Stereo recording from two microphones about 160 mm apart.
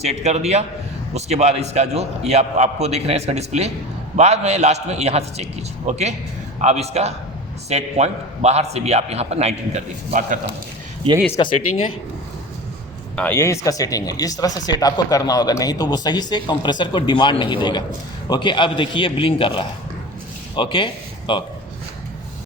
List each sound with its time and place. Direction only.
0.0 s a man's voice: 45° right (ahead or behind)
11.3 s a man's voice: 30° left (ahead or behind)
13.1 s a man's voice: 15° left (ahead or behind); by 21.4 s 30° left (ahead or behind)